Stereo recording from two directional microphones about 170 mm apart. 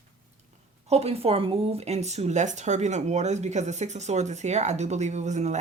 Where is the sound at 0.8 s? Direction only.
35° right (ahead or behind).